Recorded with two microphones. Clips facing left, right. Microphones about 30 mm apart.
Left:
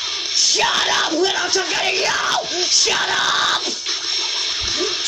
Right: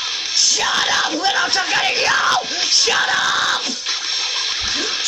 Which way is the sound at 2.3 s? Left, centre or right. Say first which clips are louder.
Right 1 dB; right.